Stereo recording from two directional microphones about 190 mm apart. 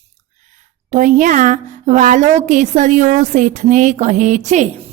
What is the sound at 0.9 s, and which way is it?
Speech, 40° right (ahead or behind).